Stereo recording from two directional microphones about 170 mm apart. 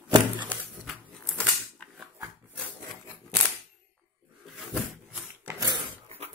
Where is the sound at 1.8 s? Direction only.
5° left (ahead or behind).